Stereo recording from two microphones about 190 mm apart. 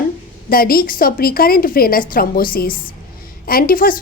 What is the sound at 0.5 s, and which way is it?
A woman's voice, 50° left (ahead or behind).